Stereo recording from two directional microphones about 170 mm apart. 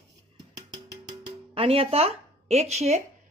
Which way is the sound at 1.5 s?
35° right (ahead or behind).